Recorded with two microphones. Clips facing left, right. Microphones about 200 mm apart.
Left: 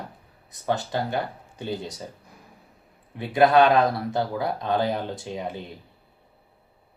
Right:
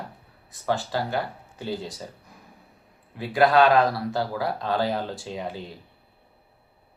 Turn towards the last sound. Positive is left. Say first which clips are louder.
# left 1 dB
turn(degrees=20)  # may be behind; listen again after turning